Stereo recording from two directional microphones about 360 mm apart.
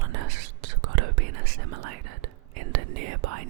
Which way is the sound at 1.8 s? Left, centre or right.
Right.